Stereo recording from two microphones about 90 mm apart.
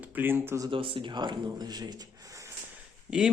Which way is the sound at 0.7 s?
75° right (ahead or behind).